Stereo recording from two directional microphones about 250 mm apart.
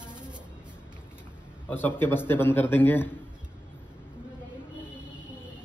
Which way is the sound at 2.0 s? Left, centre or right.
Centre.